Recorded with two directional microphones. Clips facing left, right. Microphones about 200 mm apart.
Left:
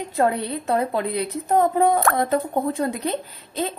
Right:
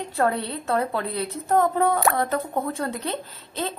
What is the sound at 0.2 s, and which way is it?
Speech, 15° left (ahead or behind).